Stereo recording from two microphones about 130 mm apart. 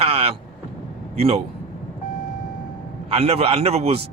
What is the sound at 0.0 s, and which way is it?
Vehicle, 50° right (ahead or behind).